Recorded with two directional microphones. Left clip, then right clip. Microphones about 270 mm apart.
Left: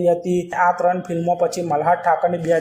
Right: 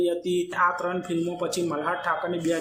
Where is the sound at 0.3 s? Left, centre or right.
Centre.